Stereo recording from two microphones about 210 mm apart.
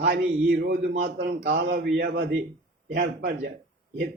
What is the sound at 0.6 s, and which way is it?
A man's voice, 50° right (ahead or behind).